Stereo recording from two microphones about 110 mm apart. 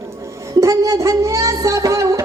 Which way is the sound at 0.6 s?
30° right (ahead or behind).